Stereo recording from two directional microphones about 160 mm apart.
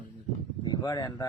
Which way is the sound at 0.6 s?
25° left (ahead or behind).